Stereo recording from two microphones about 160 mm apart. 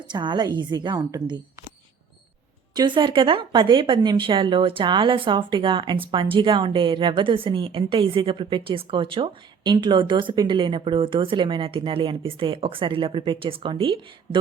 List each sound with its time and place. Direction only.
0.1 s a woman's voice: 30° right (ahead or behind)
2.7 s speech: 30° right (ahead or behind)